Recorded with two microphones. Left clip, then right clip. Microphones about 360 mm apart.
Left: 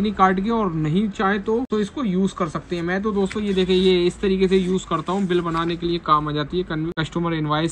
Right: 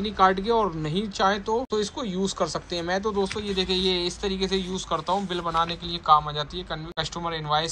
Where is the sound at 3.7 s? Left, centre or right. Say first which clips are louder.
Left 8 dB; centre.